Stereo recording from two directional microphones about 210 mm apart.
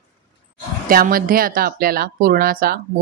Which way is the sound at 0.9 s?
45° right (ahead or behind).